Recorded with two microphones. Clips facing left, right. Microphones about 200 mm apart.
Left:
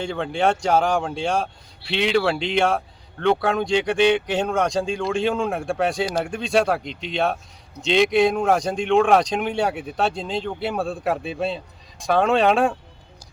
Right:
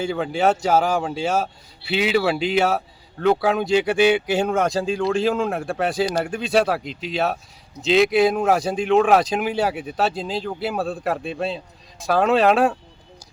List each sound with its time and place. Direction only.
0.0 s speech: 5° right (ahead or behind)